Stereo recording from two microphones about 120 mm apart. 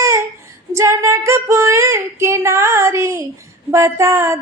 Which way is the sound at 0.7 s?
25° right (ahead or behind).